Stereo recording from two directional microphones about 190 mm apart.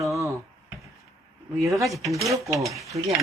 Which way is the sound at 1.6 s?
15° right (ahead or behind).